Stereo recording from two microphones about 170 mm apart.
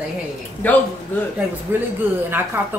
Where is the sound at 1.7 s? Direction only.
10° right (ahead or behind).